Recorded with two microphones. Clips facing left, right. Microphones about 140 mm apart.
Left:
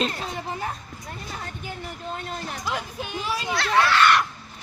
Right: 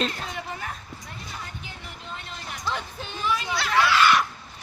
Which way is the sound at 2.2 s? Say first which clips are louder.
Left 6 dB; 45° left (ahead or behind).